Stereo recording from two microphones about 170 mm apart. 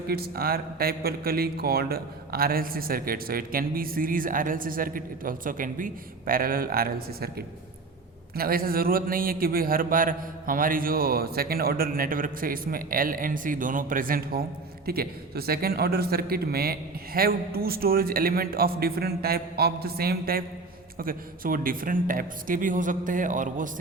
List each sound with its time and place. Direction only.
0.1 s speech: 65° right (ahead or behind)